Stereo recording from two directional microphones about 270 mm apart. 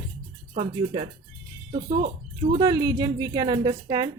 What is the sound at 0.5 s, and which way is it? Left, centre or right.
Speech, right.